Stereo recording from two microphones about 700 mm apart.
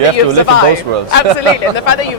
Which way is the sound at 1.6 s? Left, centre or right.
Left.